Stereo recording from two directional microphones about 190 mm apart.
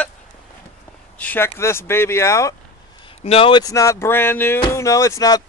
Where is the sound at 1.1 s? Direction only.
10° left (ahead or behind).